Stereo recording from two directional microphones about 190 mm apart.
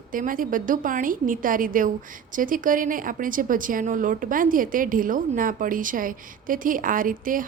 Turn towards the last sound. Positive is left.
turn(degrees=-45)  # may be behind; listen again after turning